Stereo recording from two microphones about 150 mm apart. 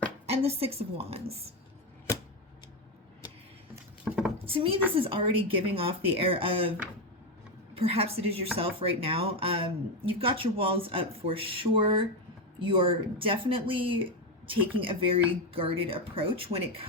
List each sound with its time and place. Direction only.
0.3 s a woman's voice: 40° right (ahead or behind)
4.0 s speech: 5° right (ahead or behind)
4.4 s speech: 35° right (ahead or behind)
7.7 s speech: 40° right (ahead or behind)